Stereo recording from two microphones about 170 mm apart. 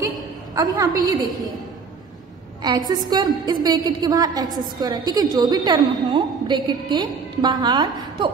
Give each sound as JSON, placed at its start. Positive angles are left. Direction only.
{"t": 0.6, "sound": "a woman's voice", "side_deg": -20}
{"t": 2.9, "sound": "a woman's voice", "side_deg": -25}